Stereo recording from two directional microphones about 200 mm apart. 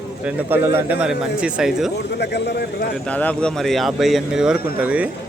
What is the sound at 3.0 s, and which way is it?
Speech, 5° left (ahead or behind).